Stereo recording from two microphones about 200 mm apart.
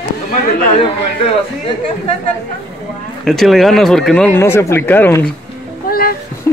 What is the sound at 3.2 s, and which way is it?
Speech, centre (ahead or behind).